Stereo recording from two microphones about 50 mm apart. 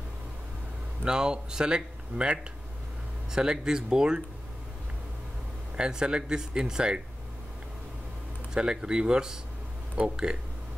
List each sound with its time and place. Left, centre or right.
1.0 s speech: centre
5.8 s speech: centre
8.5 s speech: centre